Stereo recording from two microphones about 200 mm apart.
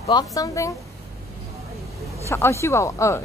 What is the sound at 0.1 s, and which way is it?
Speech, 15° left (ahead or behind).